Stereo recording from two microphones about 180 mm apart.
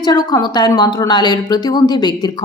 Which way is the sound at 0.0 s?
20° left (ahead or behind).